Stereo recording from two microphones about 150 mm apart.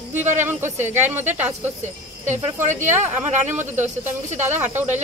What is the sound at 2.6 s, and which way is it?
Speech, 55° right (ahead or behind).